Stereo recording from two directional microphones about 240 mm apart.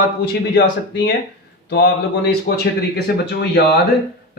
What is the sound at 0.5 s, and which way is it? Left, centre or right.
A man's voice, left.